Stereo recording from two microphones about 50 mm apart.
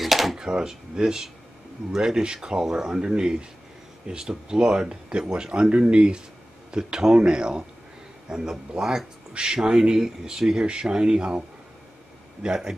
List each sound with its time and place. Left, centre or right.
0.0 s drawer open or close: centre
0.4 s speech: centre
12.4 s speech: centre